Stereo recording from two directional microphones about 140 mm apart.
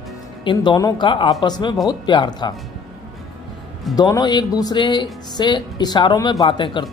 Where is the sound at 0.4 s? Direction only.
35° left (ahead or behind).